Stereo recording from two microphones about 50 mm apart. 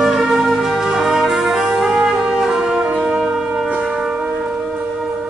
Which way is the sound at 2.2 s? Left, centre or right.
Centre.